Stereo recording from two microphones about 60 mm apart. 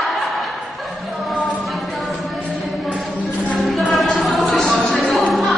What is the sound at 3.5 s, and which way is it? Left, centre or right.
Music, centre.